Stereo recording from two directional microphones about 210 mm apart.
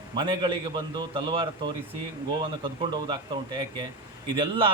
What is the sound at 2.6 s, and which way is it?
A man's voice, 25° right (ahead or behind).